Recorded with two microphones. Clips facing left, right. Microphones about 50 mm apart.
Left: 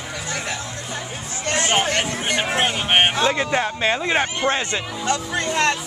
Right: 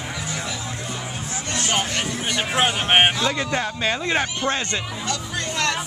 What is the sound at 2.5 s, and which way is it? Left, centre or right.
Speech, centre.